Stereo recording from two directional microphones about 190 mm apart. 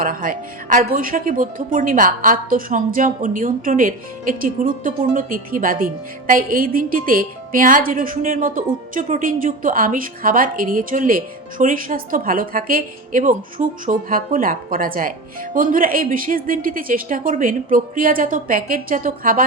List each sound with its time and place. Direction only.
0.0 s a woman's voice: 45° right (ahead or behind)